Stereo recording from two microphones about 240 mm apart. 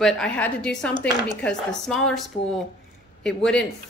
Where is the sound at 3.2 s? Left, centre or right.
Centre.